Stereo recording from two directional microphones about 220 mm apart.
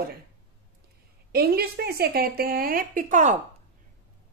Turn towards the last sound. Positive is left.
turn(degrees=-35)  # may be behind; listen again after turning